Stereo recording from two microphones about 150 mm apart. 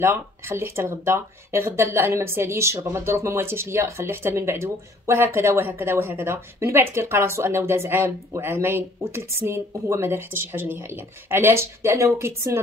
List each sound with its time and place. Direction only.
0.0 s speech: 15° right (ahead or behind)